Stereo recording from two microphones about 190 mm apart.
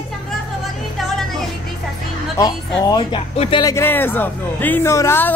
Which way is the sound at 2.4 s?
25° left (ahead or behind).